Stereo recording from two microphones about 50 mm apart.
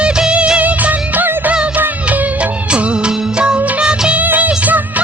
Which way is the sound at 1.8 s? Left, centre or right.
Right.